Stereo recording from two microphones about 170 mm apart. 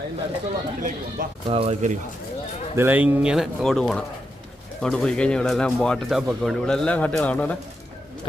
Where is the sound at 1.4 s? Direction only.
35° right (ahead or behind).